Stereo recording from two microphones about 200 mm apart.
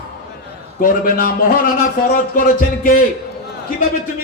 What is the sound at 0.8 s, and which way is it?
Speech, 45° left (ahead or behind).